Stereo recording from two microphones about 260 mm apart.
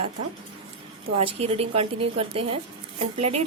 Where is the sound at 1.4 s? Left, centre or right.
Right.